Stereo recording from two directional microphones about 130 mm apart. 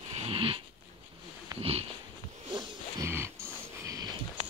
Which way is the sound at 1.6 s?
50° right (ahead or behind).